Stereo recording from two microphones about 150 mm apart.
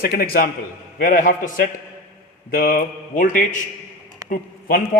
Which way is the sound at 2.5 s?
75° left (ahead or behind).